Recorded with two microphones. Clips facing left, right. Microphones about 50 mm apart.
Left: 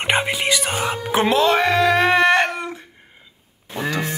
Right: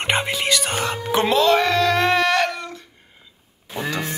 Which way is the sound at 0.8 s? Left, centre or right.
Centre.